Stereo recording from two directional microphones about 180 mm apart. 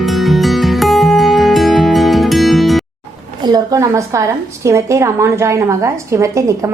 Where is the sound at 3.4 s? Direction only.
20° right (ahead or behind).